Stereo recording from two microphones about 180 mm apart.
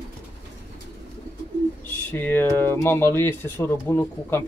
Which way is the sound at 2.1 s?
10° left (ahead or behind).